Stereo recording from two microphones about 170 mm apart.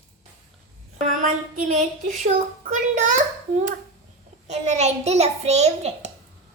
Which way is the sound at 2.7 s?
50° right (ahead or behind).